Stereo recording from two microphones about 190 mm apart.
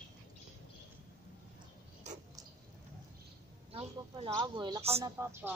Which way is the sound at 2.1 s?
40° right (ahead or behind).